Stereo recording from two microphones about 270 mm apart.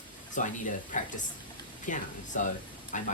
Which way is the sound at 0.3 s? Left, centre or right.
Left.